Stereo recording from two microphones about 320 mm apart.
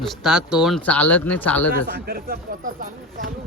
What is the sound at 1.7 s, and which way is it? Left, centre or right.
Speech, right.